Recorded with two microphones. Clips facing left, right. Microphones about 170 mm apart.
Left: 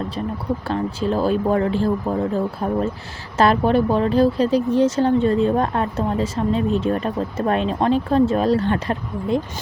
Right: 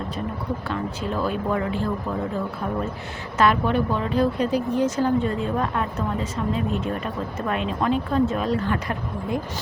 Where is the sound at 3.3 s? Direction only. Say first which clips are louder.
Left 4 dB; 35° left (ahead or behind).